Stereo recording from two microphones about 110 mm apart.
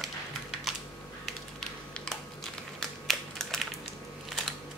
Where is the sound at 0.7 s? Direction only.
Centre (ahead or behind).